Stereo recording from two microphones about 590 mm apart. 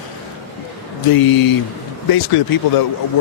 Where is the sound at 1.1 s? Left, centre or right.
Left.